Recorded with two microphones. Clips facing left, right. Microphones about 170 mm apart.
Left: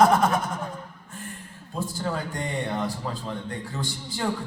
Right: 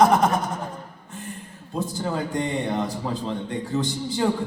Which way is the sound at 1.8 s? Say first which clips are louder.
Right 3 dB; 20° right (ahead or behind).